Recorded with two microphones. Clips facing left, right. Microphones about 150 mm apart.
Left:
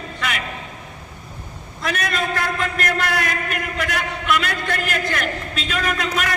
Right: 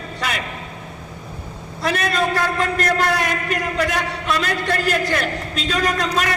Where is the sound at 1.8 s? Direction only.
35° right (ahead or behind).